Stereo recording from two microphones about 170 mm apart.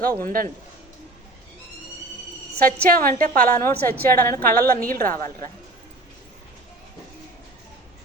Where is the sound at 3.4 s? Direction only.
15° left (ahead or behind).